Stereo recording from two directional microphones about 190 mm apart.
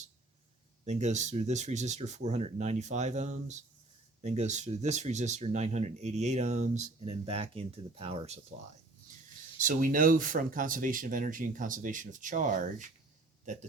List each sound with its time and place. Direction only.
0.9 s speech: 35° right (ahead or behind)
9.6 s speech: 45° right (ahead or behind)